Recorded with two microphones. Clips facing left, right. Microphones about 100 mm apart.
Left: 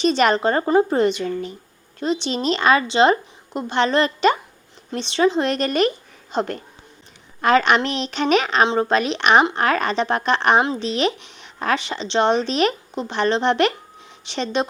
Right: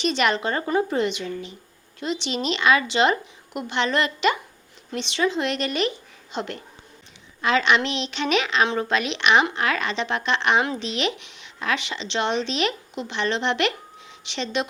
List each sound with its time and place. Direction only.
0.0 s a woman's voice: 40° left (ahead or behind)
8.6 s speech: 25° left (ahead or behind)
8.9 s speech: 40° left (ahead or behind)